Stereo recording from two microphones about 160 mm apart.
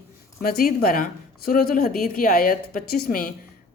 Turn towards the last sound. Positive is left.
turn(degrees=65)  # may be behind; listen again after turning